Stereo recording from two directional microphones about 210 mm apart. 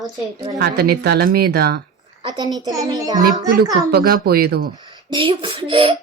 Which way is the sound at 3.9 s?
45° right (ahead or behind).